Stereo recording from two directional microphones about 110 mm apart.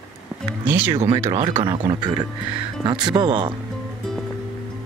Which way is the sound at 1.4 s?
50° right (ahead or behind).